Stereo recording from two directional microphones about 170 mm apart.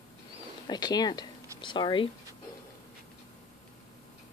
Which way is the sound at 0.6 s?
25° left (ahead or behind).